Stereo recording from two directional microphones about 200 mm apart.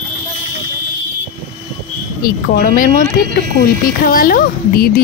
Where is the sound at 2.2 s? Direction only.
45° left (ahead or behind).